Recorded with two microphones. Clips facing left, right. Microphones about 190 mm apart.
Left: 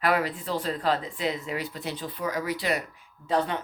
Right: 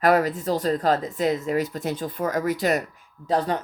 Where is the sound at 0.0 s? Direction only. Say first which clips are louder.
Right 6 dB; 45° right (ahead or behind).